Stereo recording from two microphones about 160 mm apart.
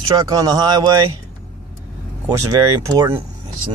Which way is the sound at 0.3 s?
25° right (ahead or behind).